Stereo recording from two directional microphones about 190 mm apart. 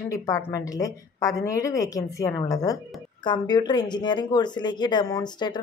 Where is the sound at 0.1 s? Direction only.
15° left (ahead or behind).